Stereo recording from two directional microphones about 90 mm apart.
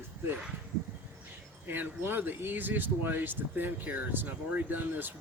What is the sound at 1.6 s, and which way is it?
Speech, 20° right (ahead or behind).